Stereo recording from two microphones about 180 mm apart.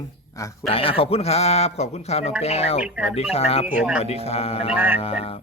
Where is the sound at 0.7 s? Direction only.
30° left (ahead or behind).